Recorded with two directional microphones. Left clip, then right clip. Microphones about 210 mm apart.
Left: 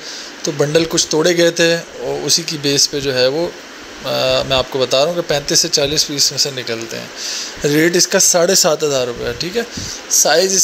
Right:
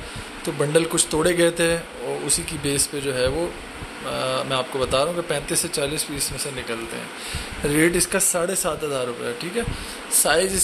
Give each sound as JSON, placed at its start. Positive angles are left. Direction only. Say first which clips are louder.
{"t": 0.6, "sound": "speech", "louder": "left 6 dB", "side_deg": 15}
{"t": 7.6, "sound": "speech", "louder": "left 7 dB", "side_deg": 15}